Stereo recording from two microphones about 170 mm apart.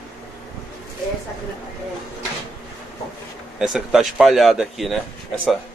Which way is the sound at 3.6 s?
Centre (ahead or behind).